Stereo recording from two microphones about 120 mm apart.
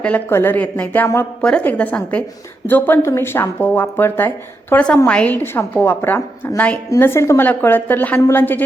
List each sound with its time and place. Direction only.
0.0 s a woman's voice: 15° left (ahead or behind)